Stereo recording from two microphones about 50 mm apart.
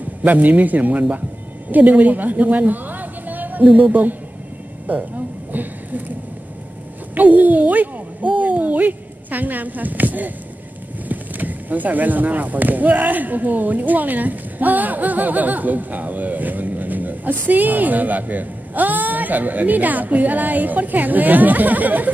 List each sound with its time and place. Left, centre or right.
0.2 s a woman's voice: right
4.8 s a sound: right
7.2 s speech: right